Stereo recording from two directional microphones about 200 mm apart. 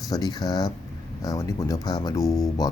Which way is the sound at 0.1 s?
20° left (ahead or behind).